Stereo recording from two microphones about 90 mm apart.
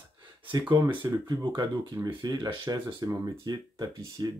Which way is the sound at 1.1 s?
45° right (ahead or behind).